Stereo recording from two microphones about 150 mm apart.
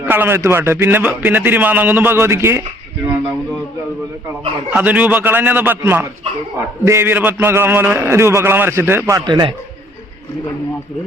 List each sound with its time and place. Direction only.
0.0 s a man's voice: 15° right (ahead or behind)
4.7 s a man's voice: 10° right (ahead or behind); by 9.6 s 30° right (ahead or behind)